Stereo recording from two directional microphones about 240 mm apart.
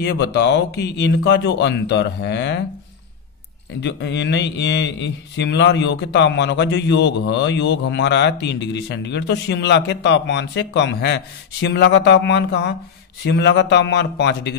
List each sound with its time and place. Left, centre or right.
0.0 s a man's voice: left
3.8 s a man's voice: left